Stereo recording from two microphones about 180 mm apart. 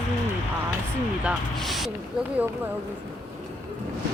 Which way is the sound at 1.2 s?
Centre (ahead or behind).